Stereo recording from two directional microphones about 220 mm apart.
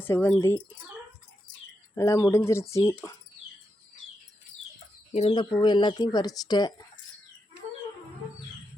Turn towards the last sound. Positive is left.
turn(degrees=20)  # may be behind; listen again after turning